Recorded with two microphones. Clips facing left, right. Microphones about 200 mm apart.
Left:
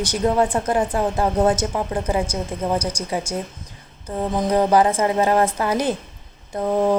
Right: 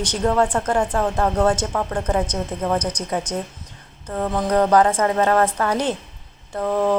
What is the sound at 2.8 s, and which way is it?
Speech, 30° left (ahead or behind).